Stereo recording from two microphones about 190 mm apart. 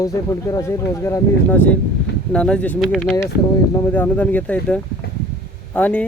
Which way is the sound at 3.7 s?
10° left (ahead or behind).